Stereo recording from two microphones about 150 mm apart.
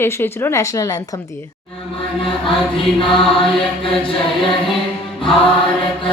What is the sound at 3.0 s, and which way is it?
Mantra, 35° left (ahead or behind).